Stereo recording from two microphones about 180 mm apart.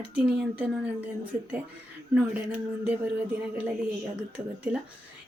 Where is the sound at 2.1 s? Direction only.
5° right (ahead or behind).